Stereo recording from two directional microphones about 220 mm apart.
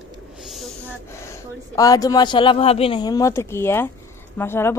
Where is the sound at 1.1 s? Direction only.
10° left (ahead or behind).